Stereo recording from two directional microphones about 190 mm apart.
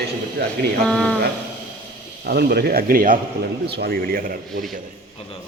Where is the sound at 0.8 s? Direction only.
5° left (ahead or behind).